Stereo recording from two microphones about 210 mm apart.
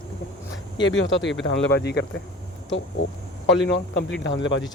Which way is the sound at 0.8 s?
60° left (ahead or behind).